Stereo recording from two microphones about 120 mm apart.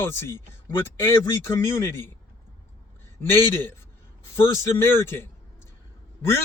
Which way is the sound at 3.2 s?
15° left (ahead or behind).